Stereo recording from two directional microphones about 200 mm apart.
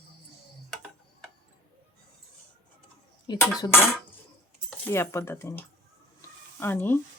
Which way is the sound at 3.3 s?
20° left (ahead or behind).